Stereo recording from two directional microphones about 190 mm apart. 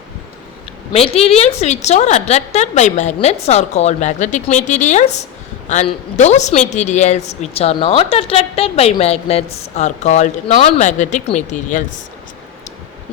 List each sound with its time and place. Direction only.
0.9 s a woman's voice: 30° left (ahead or behind)